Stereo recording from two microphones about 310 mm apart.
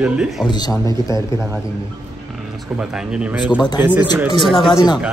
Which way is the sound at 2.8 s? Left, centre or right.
Centre.